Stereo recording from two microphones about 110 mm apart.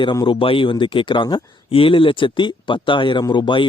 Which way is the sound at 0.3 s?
55° left (ahead or behind).